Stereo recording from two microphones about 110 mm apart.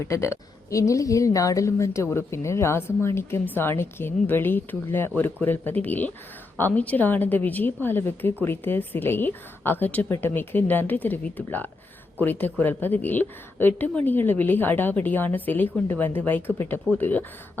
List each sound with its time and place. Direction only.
0.0 s a woman's voice: 25° left (ahead or behind)